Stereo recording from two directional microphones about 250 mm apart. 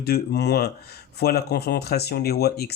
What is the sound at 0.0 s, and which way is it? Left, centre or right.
Speech, left.